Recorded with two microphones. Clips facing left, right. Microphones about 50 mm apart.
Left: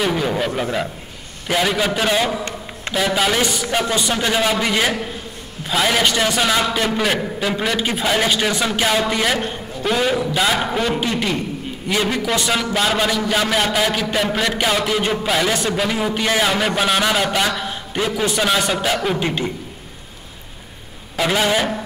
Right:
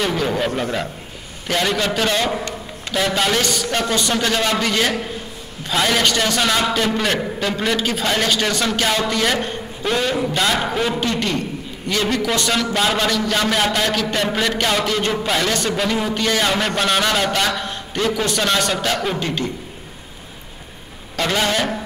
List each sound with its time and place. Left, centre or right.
0.0 s a sound: centre
0.6 s a man's voice: centre
21.2 s a man's voice: centre